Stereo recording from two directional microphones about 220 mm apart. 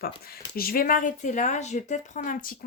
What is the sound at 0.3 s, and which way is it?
Speech, 40° left (ahead or behind).